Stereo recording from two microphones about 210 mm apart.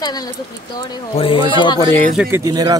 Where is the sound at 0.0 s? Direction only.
20° left (ahead or behind).